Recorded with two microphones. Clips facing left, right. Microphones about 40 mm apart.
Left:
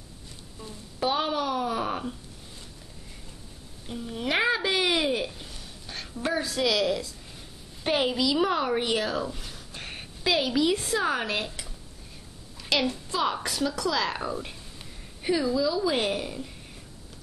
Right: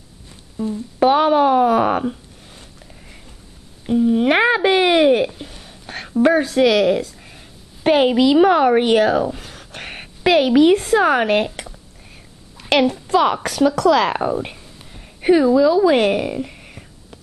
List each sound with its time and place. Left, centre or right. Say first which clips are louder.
0.6 s speech: right 19 dB; centre
0.9 s a woman's voice: right 13 dB; right
3.8 s speech: right 17 dB; right
7.3 s a sound: right 3 dB; right
8.5 s a woman's voice: right 12 dB; right
9.6 s a sound: right 7 dB; right
9.8 s a woman's voice: right 10 dB; right
14.9 s a sound: right 13 dB; right
15.8 s a woman's voice: right 12 dB; right